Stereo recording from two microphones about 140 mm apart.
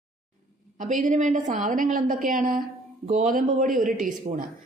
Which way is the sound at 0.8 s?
65° right (ahead or behind).